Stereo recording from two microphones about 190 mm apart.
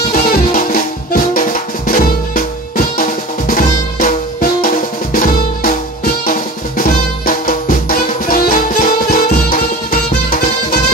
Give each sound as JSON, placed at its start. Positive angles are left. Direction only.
{"t": 0.1, "sound": "music", "side_deg": 45}
{"t": 3.0, "sound": "drum", "side_deg": 45}
{"t": 6.2, "sound": "music", "side_deg": 45}